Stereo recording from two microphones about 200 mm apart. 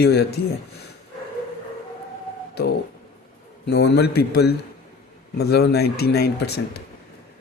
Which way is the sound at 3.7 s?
55° left (ahead or behind).